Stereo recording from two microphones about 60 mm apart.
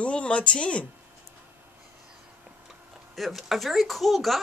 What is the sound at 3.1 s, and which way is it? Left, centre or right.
Speech, centre.